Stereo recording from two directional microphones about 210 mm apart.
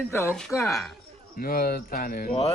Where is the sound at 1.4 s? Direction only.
45° left (ahead or behind).